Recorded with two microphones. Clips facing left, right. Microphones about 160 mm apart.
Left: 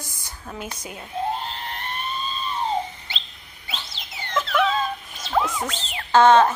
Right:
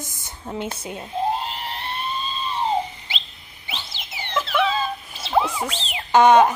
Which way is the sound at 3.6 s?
5° right (ahead or behind).